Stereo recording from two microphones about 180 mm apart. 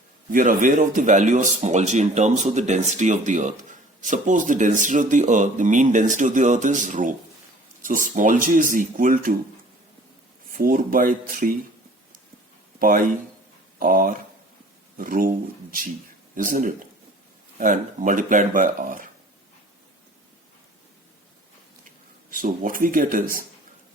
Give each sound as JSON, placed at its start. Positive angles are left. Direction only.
{"t": 0.3, "sound": "speech", "side_deg": -45}
{"t": 10.5, "sound": "speech", "side_deg": -50}
{"t": 13.7, "sound": "speech", "side_deg": -50}
{"t": 16.3, "sound": "speech", "side_deg": -50}
{"t": 22.3, "sound": "speech", "side_deg": -50}